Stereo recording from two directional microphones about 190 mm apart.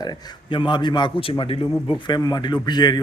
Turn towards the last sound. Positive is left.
turn(degrees=20)  # may be behind; listen again after turning